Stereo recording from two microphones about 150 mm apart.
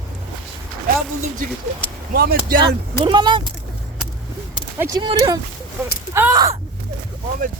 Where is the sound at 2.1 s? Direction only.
85° right.